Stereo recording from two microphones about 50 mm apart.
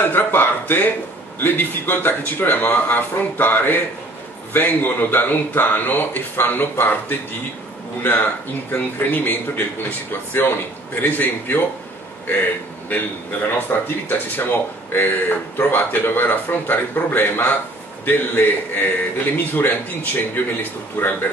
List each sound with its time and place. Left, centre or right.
0.1 s a sound: left
1.4 s speech: left
13.6 s speech: left